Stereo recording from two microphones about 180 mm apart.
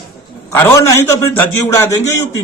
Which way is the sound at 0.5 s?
15° left (ahead or behind).